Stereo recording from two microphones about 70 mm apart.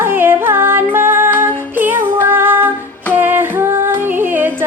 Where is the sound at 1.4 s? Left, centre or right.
Right.